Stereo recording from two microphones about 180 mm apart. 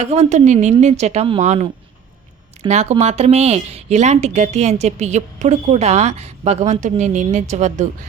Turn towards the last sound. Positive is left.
turn(degrees=-40)  # may be behind; listen again after turning